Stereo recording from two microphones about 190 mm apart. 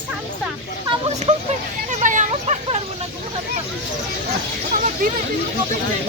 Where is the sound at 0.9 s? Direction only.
30° right (ahead or behind).